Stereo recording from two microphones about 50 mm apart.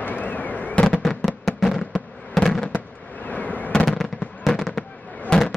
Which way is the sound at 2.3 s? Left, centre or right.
Centre.